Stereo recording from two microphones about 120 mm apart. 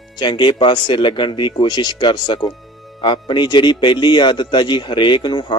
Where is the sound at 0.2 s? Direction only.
40° left (ahead or behind).